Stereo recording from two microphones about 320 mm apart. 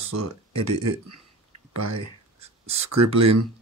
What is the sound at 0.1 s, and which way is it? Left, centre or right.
Speech, right.